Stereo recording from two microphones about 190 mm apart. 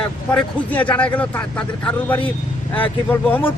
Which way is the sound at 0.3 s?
5° left (ahead or behind).